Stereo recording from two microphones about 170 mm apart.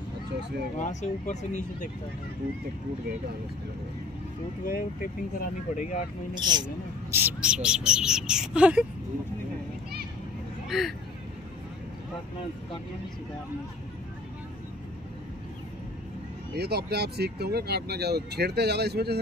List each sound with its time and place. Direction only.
0.7 s speech: 45° left (ahead or behind)
4.6 s speech: 60° left (ahead or behind)
6.3 s speech: 25° right (ahead or behind)
7.2 s speech: 10° right (ahead or behind)
10.7 s speech: centre (ahead or behind)
16.5 s speech: 70° right (ahead or behind)